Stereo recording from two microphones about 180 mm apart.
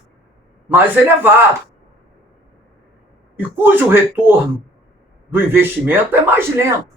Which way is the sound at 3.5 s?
10° right (ahead or behind).